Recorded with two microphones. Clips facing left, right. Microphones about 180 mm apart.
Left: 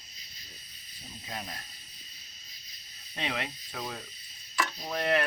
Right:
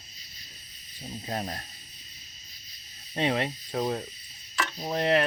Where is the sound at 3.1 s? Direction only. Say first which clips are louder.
Right 8 dB; 35° right (ahead or behind).